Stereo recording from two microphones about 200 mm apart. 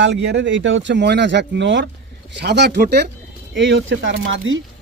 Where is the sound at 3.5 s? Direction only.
70° right (ahead or behind).